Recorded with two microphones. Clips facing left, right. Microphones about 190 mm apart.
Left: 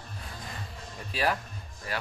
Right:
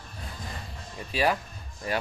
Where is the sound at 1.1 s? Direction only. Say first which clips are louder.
Right 3 dB; centre (ahead or behind).